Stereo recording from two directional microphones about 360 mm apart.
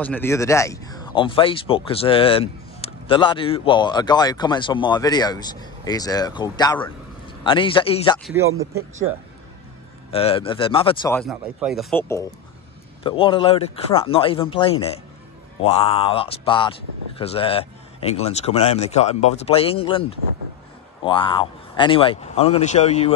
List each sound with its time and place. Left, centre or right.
0.0 s speech: centre
8.2 s speech: centre
10.1 s speech: centre